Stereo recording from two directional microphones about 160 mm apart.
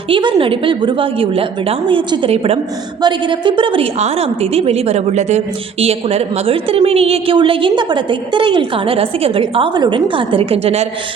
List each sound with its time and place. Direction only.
0.1 s a woman's voice: 30° right (ahead or behind)